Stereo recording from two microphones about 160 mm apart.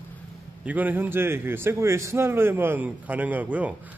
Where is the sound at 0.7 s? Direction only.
10° right (ahead or behind).